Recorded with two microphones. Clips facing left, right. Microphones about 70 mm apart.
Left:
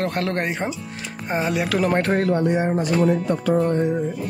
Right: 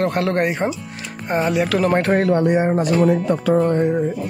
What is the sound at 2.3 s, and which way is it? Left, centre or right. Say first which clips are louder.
Speech: right 3 dB; right.